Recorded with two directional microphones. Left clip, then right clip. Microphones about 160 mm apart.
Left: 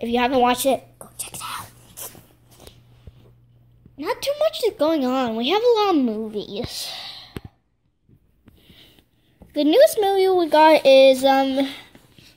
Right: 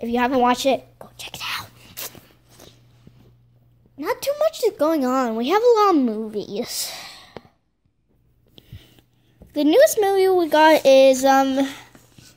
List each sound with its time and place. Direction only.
0.0 s whispering: 5° right (ahead or behind)
4.0 s speech: 15° right (ahead or behind)
6.6 s speech: 35° right (ahead or behind)
7.0 s sigh: 90° right
8.7 s a sound: 15° right (ahead or behind)
9.6 s speech: 10° right (ahead or behind)